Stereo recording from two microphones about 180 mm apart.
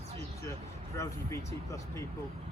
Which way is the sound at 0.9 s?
15° left (ahead or behind).